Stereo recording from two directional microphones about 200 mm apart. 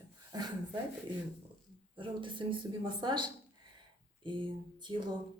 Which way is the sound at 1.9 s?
25° right (ahead or behind).